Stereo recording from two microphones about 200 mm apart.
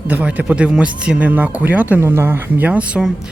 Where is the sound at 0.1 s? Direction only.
5° right (ahead or behind).